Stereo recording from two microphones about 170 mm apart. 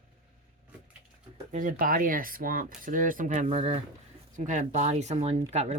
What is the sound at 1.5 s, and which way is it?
Speech, 55° right (ahead or behind).